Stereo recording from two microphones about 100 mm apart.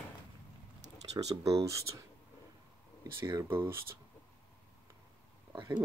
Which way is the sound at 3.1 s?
30° right (ahead or behind).